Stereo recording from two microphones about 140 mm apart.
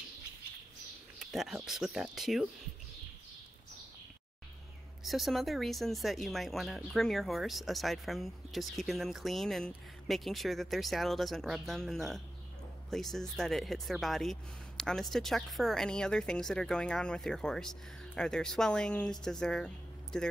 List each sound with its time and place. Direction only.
1.2 s speech: centre (ahead or behind)
5.0 s speech: centre (ahead or behind)